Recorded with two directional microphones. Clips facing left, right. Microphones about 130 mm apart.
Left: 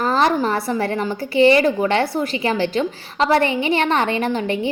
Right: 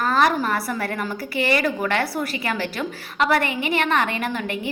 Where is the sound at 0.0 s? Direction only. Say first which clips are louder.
Left 2 dB; 25° left (ahead or behind).